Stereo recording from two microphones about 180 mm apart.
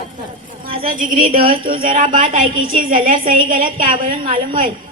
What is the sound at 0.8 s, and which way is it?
Speech, 45° right (ahead or behind).